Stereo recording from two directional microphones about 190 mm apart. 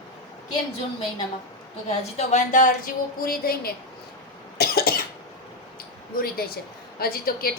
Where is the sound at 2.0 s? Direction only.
35° left (ahead or behind); by 3.7 s 50° left (ahead or behind).